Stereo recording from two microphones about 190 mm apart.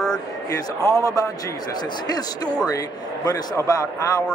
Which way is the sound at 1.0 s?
20° left (ahead or behind).